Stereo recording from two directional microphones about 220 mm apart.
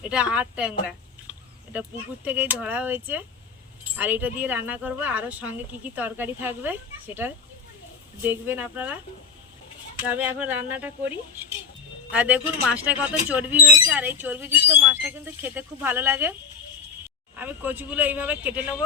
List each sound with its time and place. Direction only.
0.1 s speech: 5° right (ahead or behind)
2.2 s speech: 10° right (ahead or behind)
10.0 s speech: 5° right (ahead or behind)
12.1 s speech: 5° right (ahead or behind)
17.3 s speech: 10° right (ahead or behind)